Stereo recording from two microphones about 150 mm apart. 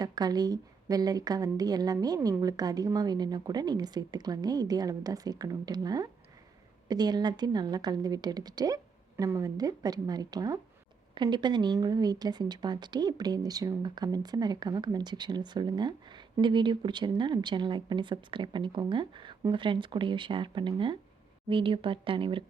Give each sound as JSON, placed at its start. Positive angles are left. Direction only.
{"t": 0.0, "sound": "speech", "side_deg": -25}